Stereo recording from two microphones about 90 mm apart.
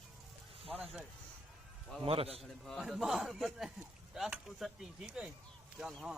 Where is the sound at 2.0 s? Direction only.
90° right.